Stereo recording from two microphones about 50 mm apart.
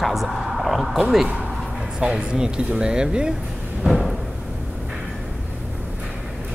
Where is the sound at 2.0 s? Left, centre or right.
Centre.